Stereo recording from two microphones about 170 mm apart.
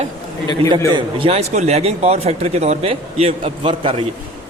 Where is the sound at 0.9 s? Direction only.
35° right (ahead or behind).